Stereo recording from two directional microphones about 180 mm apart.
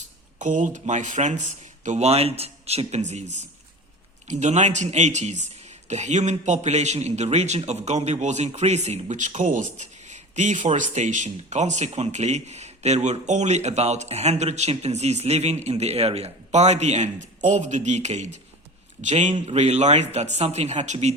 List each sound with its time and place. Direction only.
0.3 s speech: 45° right (ahead or behind)